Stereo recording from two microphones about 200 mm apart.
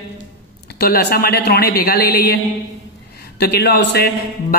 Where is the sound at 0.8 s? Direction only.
50° left (ahead or behind).